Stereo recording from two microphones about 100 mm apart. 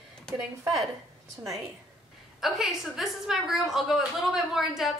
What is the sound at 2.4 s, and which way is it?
A woman's voice, 5° right (ahead or behind).